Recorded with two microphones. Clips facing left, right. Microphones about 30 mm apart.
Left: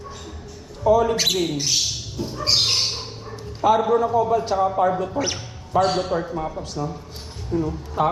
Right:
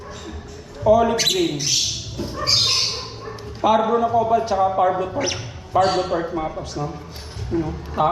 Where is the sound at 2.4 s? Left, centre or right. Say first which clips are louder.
Right 1 dB; centre.